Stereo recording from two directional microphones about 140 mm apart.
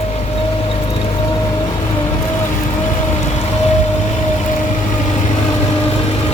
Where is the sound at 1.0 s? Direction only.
30° left (ahead or behind).